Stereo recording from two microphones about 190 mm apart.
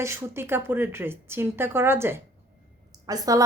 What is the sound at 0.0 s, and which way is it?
Speech, 15° right (ahead or behind).